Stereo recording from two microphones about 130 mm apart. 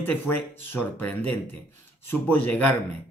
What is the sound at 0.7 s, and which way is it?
Speech, 15° left (ahead or behind).